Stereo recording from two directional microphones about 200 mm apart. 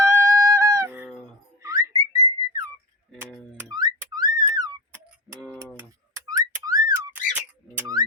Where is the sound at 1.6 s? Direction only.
20° right (ahead or behind).